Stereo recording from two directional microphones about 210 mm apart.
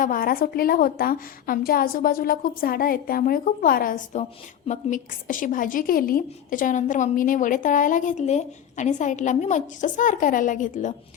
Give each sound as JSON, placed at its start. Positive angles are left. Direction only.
{"t": 0.0, "sound": "a woman's voice", "side_deg": 40}